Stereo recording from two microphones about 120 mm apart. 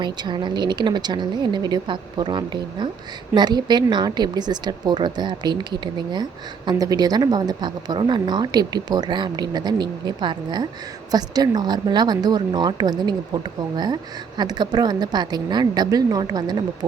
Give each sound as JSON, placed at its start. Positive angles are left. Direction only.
{"t": 0.0, "sound": "a woman's voice", "side_deg": -40}